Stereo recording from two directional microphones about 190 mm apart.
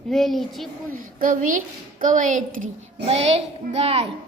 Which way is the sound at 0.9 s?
45° right (ahead or behind).